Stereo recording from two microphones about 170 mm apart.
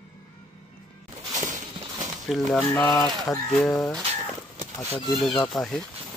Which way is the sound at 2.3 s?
10° left (ahead or behind).